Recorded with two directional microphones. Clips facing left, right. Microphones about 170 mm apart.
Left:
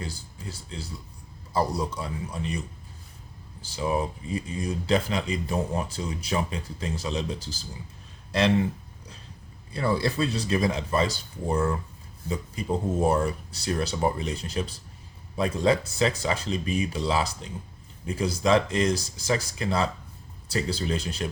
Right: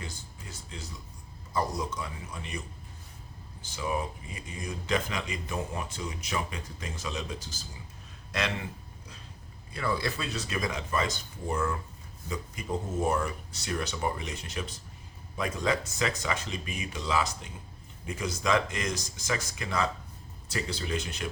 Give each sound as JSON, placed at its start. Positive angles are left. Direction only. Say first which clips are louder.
{"t": 0.5, "sound": "speech", "louder": "left 3 dB", "side_deg": 30}
{"t": 3.6, "sound": "speech", "louder": "left 5 dB", "side_deg": 35}
{"t": 9.7, "sound": "speech", "louder": "left 6 dB", "side_deg": 30}